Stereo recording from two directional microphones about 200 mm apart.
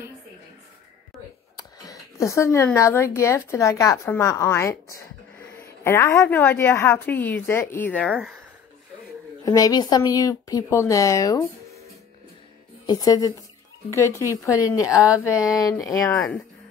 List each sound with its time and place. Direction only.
1.6 s a woman's voice: 15° left (ahead or behind); by 8.4 s centre (ahead or behind)
9.4 s a woman's voice: 20° left (ahead or behind)
12.8 s a woman's voice: 20° left (ahead or behind)